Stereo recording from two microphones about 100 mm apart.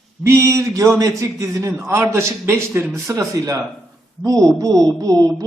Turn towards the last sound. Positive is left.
turn(degrees=-35)  # may be behind; listen again after turning